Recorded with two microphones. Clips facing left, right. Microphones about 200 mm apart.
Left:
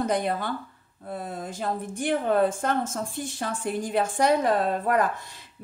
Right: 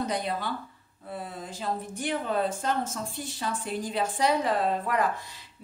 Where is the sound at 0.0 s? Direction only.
50° left (ahead or behind).